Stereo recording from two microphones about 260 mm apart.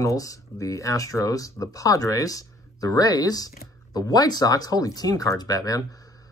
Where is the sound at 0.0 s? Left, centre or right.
Centre.